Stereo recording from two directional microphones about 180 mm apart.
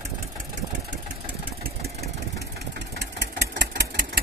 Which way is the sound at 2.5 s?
65° right (ahead or behind).